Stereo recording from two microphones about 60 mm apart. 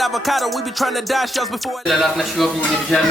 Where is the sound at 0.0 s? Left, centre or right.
Centre.